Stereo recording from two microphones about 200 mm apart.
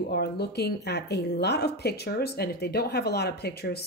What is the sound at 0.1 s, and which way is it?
Speech, 55° left (ahead or behind).